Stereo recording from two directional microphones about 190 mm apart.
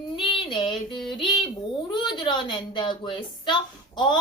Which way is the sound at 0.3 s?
25° left (ahead or behind).